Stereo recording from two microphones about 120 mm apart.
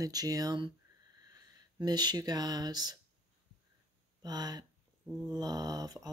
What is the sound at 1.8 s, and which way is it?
Speech, 35° right (ahead or behind).